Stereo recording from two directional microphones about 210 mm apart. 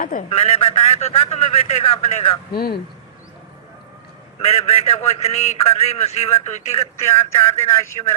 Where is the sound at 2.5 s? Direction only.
45° left (ahead or behind).